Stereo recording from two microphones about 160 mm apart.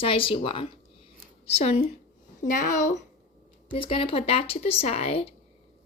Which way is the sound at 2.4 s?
55° left (ahead or behind).